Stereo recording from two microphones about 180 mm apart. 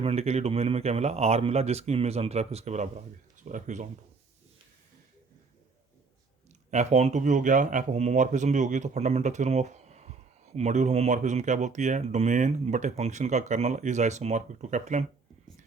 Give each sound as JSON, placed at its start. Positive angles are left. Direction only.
{"t": 0.0, "sound": "speech", "side_deg": -35}
{"t": 6.7, "sound": "speech", "side_deg": -40}